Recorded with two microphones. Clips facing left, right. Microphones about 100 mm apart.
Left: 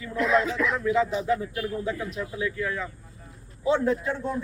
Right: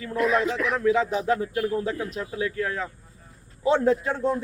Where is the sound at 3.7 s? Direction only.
55° right (ahead or behind).